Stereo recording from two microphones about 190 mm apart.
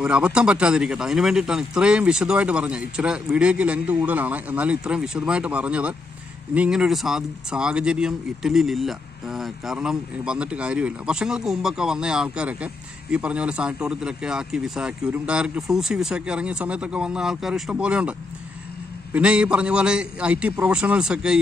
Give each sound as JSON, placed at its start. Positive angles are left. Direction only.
{"t": 0.0, "sound": "speech", "side_deg": -5}
{"t": 19.1, "sound": "speech", "side_deg": -5}